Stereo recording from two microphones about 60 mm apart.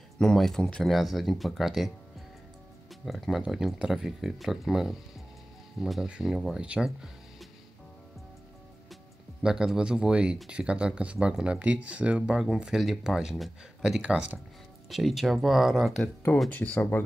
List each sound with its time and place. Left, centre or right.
0.2 s speech: centre
0.9 s speech: centre
3.1 s speech: centre
9.4 s speech: centre
11.6 s speech: right; by 15.9 s centre
16.3 s speech: left